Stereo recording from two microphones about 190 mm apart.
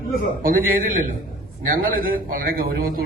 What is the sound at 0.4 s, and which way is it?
A man's voice, 45° right (ahead or behind).